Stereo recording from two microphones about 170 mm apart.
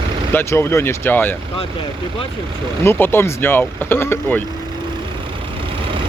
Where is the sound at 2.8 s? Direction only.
15° left (ahead or behind).